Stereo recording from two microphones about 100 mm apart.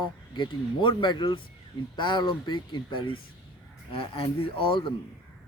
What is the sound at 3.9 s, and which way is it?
Speech, 65° left (ahead or behind).